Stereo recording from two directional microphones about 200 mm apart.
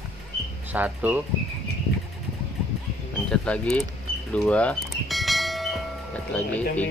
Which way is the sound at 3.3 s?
5° left (ahead or behind).